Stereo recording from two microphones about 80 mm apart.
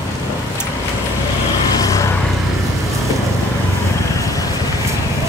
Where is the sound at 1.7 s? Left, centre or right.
Left.